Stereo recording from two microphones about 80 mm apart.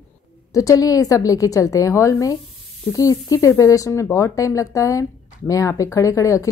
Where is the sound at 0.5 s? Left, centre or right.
Left.